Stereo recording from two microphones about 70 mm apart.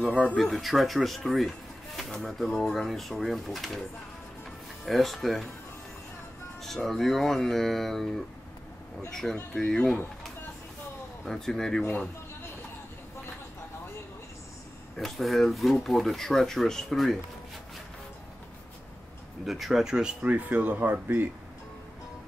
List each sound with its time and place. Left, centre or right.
0.0 s speech: centre
0.4 s speech: centre
4.8 s speech: centre
6.6 s speech: centre
9.1 s speech: centre
11.2 s speech: centre
15.0 s speech: centre
19.4 s speech: centre
20.2 s speech: right